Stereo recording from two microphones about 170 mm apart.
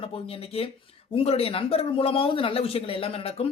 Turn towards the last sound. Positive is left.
turn(degrees=35)  # may be behind; listen again after turning